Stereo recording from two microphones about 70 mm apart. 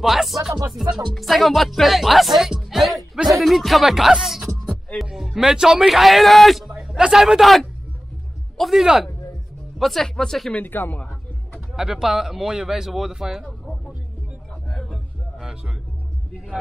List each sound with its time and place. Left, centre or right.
0.0 s music: centre
10.5 s speech: left
11.7 s speech: centre
14.7 s music: centre